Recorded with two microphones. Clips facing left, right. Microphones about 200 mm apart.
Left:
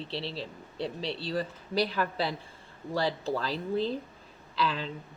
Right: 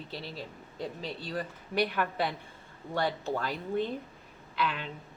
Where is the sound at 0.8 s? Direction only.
90° left.